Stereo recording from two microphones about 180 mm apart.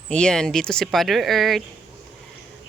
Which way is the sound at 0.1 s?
5° left (ahead or behind).